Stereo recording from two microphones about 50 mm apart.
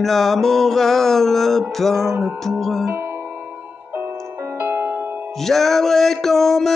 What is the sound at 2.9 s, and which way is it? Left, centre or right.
Music, right.